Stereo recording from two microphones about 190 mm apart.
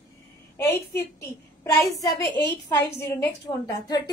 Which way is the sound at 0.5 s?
10° left (ahead or behind).